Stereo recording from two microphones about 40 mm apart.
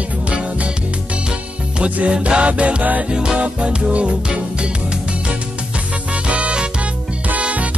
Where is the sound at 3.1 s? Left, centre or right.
Right.